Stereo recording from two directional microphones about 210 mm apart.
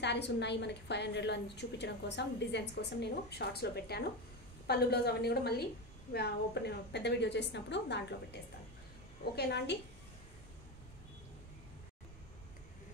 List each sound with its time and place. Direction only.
0.0 s a woman's voice: 55° left (ahead or behind)